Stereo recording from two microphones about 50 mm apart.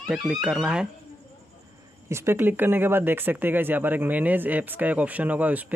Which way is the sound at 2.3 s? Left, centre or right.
Right.